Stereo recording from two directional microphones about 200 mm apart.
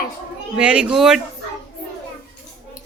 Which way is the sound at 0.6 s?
5° right (ahead or behind).